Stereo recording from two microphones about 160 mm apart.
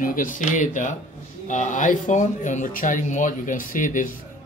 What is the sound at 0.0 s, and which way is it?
Speech, 55° left (ahead or behind).